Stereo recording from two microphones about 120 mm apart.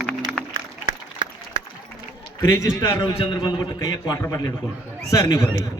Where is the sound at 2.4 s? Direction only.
25° left (ahead or behind).